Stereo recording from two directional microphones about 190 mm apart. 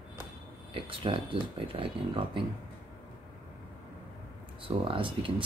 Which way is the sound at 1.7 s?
25° right (ahead or behind).